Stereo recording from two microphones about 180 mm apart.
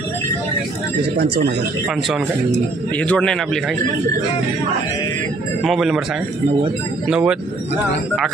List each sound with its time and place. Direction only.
1.1 s speech: 60° right (ahead or behind)
3.0 s speech: 5° left (ahead or behind)
5.6 s speech: centre (ahead or behind)
7.1 s speech: 5° right (ahead or behind)